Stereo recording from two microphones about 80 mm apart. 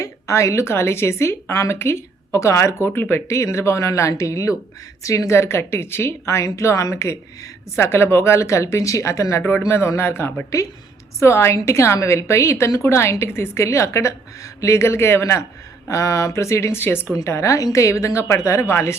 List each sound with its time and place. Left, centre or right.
0.0 s speech: left